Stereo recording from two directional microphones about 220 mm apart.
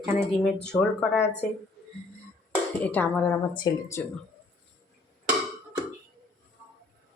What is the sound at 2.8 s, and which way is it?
Speech, 5° left (ahead or behind).